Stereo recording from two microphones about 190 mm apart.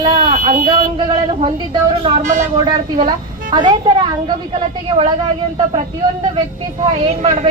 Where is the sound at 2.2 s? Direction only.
40° right (ahead or behind).